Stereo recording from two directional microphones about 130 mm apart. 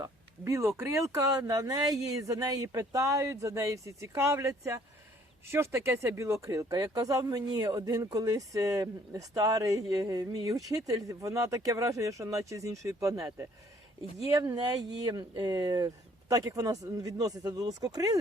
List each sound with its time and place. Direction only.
0.0 s speech: 25° right (ahead or behind)